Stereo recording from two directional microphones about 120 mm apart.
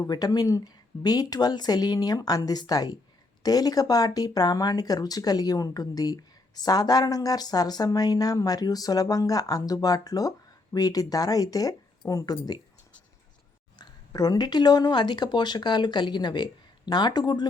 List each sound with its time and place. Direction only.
0.0 s speech: 30° left (ahead or behind)
13.7 s speech: 35° left (ahead or behind)